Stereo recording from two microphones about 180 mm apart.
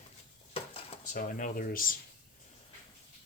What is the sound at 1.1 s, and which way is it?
Speech, 50° left (ahead or behind).